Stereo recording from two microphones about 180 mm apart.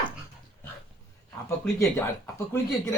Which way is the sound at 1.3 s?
15° left (ahead or behind).